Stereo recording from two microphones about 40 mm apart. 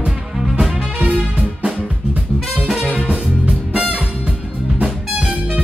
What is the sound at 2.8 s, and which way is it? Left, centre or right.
Music, right.